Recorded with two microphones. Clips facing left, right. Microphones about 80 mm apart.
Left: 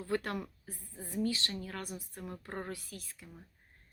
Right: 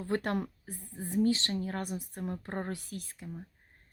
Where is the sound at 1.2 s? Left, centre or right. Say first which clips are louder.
Right 6 dB; right.